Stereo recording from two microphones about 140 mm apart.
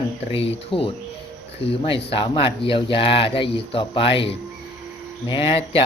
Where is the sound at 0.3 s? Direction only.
40° left (ahead or behind).